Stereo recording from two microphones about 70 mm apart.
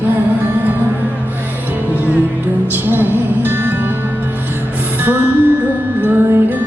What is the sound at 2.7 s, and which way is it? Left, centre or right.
Music, right.